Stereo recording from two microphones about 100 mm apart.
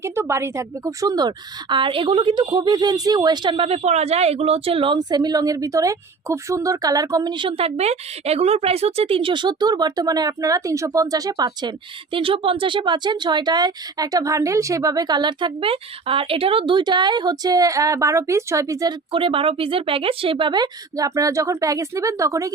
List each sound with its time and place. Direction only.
0.0 s speech: 25° right (ahead or behind)
1.7 s speech: 60° right (ahead or behind)
3.7 s a woman's voice: 90° right; by 4.9 s 65° right (ahead or behind)
4.9 s speech: 45° right (ahead or behind)
7.3 s speech: 65° right (ahead or behind); by 11.7 s 40° right (ahead or behind)
12.1 s speech: 65° right (ahead or behind); by 18.9 s 35° right (ahead or behind)
19.1 s speech: 65° right (ahead or behind); by 22.5 s 35° right (ahead or behind)